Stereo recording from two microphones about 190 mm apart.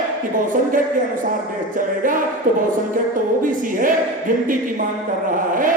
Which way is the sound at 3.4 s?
45° right (ahead or behind).